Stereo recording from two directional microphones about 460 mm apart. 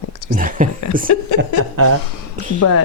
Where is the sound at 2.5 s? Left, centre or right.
Left.